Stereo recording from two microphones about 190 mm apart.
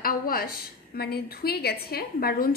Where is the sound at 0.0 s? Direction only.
50° left (ahead or behind).